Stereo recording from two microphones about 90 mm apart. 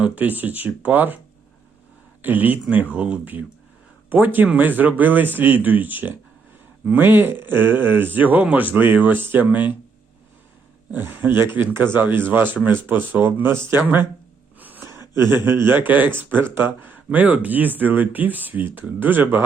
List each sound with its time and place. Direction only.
0.0 s speech: 20° right (ahead or behind)
2.2 s speech: 20° right (ahead or behind)
10.9 s speech: 25° right (ahead or behind)
14.6 s gasp: 20° right (ahead or behind)
15.4 s speech: 25° right (ahead or behind)